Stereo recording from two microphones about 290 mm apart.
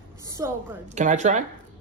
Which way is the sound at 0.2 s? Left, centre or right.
Centre.